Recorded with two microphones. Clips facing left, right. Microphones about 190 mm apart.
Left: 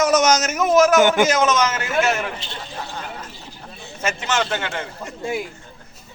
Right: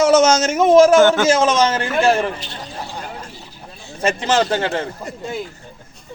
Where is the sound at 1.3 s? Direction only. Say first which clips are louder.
Right 4 dB; 30° right (ahead or behind).